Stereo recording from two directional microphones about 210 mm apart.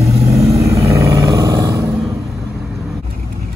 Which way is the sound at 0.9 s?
15° right (ahead or behind).